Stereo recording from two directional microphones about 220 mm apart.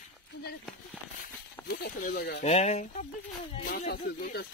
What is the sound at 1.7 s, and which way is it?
Speech, 40° left (ahead or behind).